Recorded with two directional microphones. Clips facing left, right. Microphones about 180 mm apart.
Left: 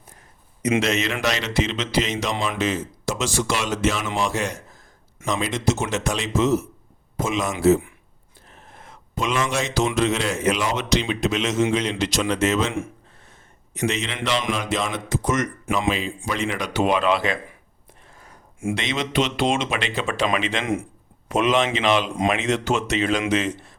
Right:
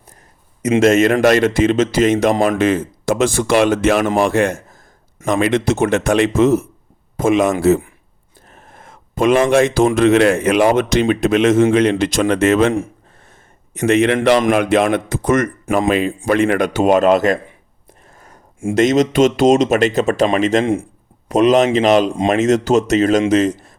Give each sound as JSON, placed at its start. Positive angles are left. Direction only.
{"t": 0.8, "sound": "a man's voice", "side_deg": -50}
{"t": 8.4, "sound": "a man's voice", "side_deg": -50}
{"t": 13.7, "sound": "a man's voice", "side_deg": -55}
{"t": 15.6, "sound": "speech", "side_deg": -40}
{"t": 15.9, "sound": "a man's voice", "side_deg": -55}
{"t": 18.7, "sound": "a man's voice", "side_deg": -45}